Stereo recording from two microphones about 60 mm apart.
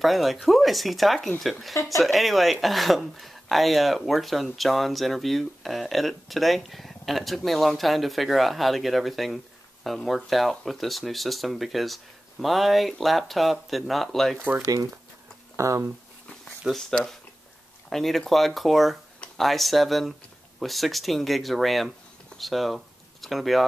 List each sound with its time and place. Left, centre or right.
0.0 s speech: centre
15.5 s speech: right
16.7 s speech: centre